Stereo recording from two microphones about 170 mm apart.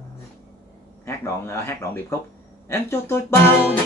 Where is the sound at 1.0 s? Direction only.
15° left (ahead or behind).